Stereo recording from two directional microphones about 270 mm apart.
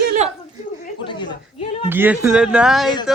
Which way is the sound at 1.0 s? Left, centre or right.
Centre.